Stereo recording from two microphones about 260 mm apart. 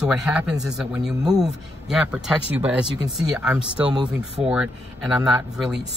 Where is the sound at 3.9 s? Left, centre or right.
Centre.